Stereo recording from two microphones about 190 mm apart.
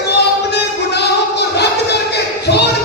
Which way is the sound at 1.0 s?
60° left (ahead or behind).